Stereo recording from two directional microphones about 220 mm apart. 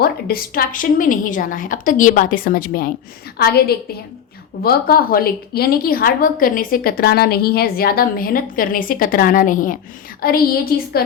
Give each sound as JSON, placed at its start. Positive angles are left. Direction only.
{"t": 0.0, "sound": "a woman's voice", "side_deg": 45}